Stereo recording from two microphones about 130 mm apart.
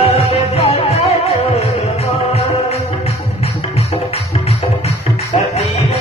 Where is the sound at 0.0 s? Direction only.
50° left (ahead or behind).